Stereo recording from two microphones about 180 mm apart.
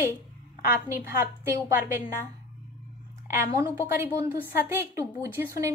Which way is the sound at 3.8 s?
15° right (ahead or behind).